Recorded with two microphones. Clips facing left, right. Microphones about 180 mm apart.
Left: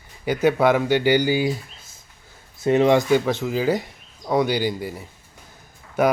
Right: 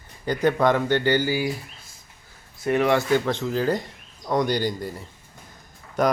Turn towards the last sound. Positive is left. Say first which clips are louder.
# left 2 dB
turn(degrees=5)  # may be behind; listen again after turning